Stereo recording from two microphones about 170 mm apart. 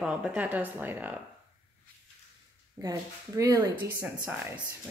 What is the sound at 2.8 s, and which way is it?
Speech, 20° right (ahead or behind).